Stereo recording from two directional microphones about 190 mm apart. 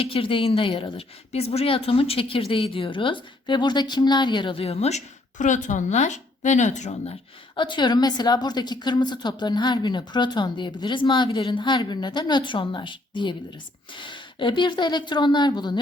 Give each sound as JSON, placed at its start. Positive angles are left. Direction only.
{"t": 0.0, "sound": "speech", "side_deg": 30}